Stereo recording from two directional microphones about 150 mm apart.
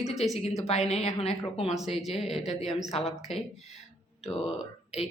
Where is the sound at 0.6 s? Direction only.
45° left (ahead or behind).